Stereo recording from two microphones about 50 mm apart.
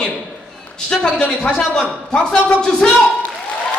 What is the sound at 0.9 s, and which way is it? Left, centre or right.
A man's voice, centre.